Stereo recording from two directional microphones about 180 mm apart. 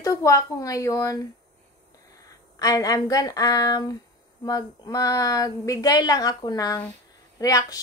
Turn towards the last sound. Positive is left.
turn(degrees=20)  # may be behind; listen again after turning